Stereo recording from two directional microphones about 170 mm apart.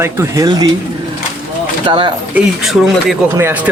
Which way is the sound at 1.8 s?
25° right (ahead or behind).